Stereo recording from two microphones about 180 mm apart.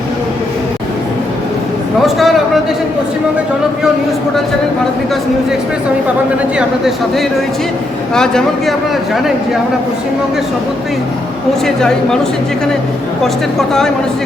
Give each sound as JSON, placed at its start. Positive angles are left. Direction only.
{"t": 2.0, "sound": "a man's voice", "side_deg": 0}
{"t": 6.6, "sound": "speech", "side_deg": 0}
{"t": 11.6, "sound": "speech", "side_deg": 5}
{"t": 13.2, "sound": "speech", "side_deg": 0}